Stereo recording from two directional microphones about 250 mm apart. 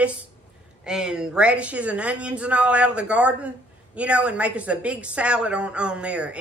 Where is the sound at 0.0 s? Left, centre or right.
Centre.